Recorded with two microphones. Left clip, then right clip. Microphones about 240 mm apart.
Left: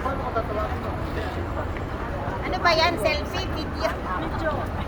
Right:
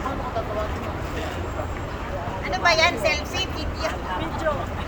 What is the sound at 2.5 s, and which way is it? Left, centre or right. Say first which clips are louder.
Vehicle: right 2 dB; centre.